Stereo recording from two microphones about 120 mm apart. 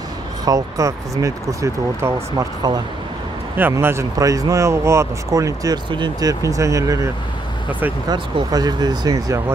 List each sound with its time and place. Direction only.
0.5 s speech: 30° right (ahead or behind)
3.5 s speech: 20° right (ahead or behind)
8.1 s speech: 35° right (ahead or behind)